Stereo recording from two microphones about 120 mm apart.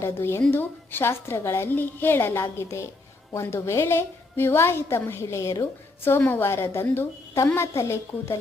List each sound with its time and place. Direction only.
0.0 s a woman's voice: 20° left (ahead or behind)